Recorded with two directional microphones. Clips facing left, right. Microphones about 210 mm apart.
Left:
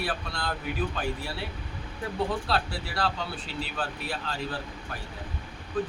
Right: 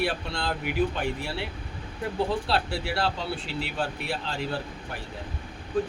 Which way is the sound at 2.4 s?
30° right (ahead or behind).